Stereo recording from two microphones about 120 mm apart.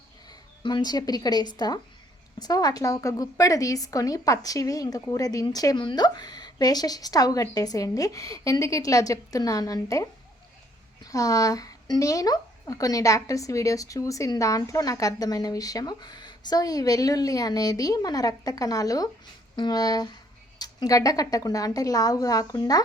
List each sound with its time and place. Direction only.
0.3 s a woman's voice: 35° left (ahead or behind)